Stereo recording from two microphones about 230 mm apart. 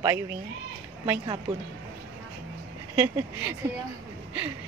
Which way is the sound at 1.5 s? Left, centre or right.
Right.